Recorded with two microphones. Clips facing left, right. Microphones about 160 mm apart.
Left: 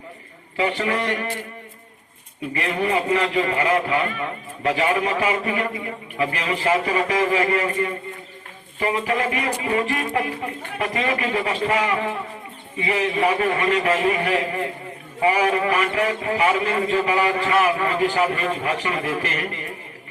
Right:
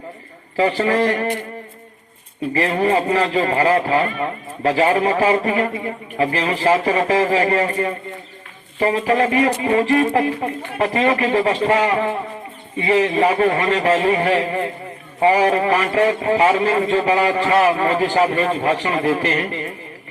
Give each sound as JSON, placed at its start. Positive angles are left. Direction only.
{"t": 0.5, "sound": "a man's voice", "side_deg": -35}
{"t": 2.5, "sound": "a man's voice", "side_deg": -35}